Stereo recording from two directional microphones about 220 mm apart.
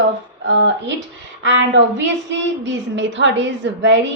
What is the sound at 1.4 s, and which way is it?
A woman's voice, 60° right (ahead or behind).